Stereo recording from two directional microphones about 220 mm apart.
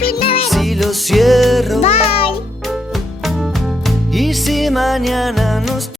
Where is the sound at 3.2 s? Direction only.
Centre (ahead or behind).